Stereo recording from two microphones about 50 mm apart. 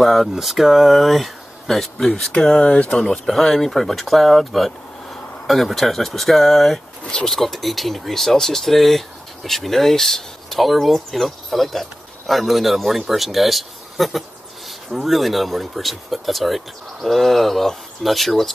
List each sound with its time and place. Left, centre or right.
0.0 s speech: centre
2.6 s speech: left
3.1 s speech: centre